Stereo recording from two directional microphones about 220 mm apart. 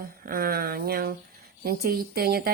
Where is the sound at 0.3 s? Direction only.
40° right (ahead or behind).